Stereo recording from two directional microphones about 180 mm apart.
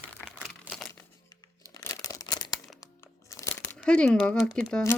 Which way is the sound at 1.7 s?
20° left (ahead or behind).